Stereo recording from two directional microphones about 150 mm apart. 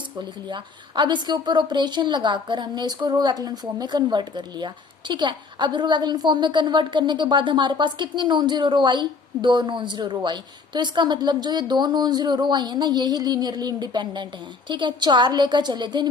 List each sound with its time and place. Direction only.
0.2 s a woman's voice: 30° right (ahead or behind)